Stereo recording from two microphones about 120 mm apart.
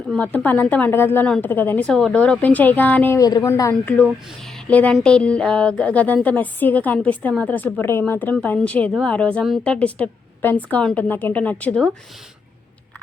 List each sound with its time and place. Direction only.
0.2 s a woman's voice: 15° left (ahead or behind)
1.9 s a woman's voice: 5° left (ahead or behind)
3.2 s a woman's voice: 30° left (ahead or behind)
3.8 s a woman's voice: 10° left (ahead or behind)